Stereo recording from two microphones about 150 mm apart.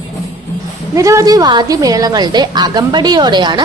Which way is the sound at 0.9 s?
20° right (ahead or behind).